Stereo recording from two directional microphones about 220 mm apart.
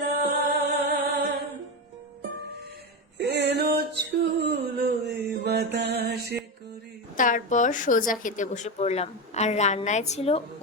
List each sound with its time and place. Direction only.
0.0 s music: 50° right (ahead or behind)
3.2 s a sound: 50° right (ahead or behind)
7.2 s a woman's voice: 35° left (ahead or behind)